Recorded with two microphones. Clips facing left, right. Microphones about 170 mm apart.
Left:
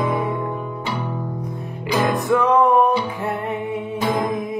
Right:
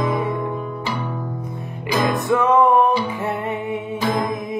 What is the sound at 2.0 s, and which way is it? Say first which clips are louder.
Music: even; centre (ahead or behind).